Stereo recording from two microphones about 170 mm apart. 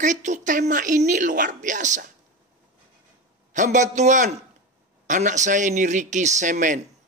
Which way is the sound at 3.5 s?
45° right (ahead or behind).